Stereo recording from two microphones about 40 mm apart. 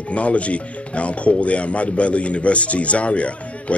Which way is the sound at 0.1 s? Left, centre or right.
Left.